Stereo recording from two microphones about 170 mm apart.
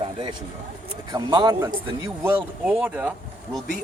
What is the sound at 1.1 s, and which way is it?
Speech, 25° right (ahead or behind).